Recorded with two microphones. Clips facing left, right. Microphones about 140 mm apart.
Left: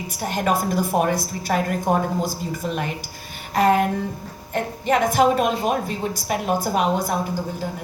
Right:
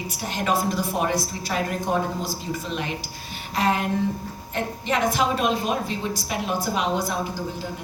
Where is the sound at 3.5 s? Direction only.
50° left (ahead or behind).